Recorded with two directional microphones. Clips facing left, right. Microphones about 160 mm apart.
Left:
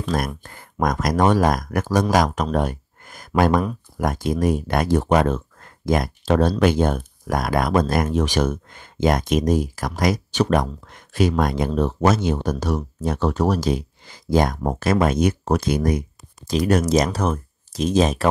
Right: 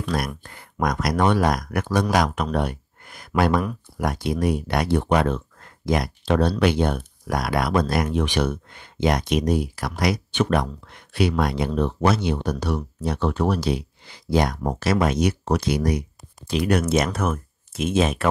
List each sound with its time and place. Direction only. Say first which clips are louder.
0.4 s speech: left 2 dB; 40° left (ahead or behind)